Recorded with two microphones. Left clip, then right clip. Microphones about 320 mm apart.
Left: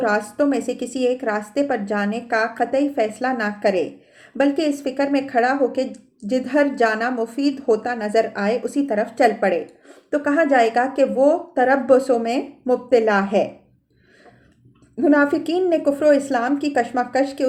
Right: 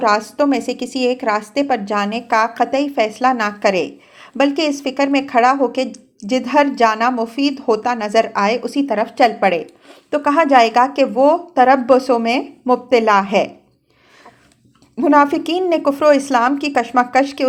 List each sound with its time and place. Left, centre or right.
0.0 s a woman's voice: right
14.9 s a woman's voice: right